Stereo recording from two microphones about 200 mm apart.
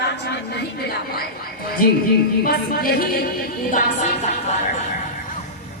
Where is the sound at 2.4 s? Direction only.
50° left (ahead or behind).